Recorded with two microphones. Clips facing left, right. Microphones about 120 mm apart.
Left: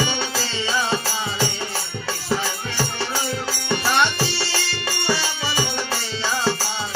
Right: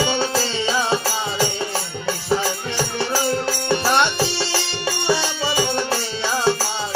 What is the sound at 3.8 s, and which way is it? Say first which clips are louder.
Music: right 1 dB; 25° right (ahead or behind).